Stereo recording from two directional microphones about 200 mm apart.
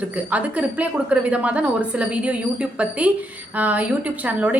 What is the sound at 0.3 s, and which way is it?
A woman's voice, 5° right (ahead or behind).